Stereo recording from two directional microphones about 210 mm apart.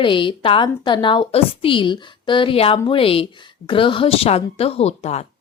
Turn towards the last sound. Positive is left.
turn(degrees=30)  # may be behind; listen again after turning